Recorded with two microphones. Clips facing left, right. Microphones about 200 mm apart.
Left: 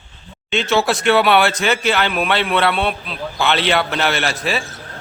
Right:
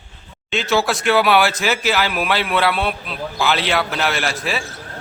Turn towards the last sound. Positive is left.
turn(degrees=0)  # may be behind; listen again after turning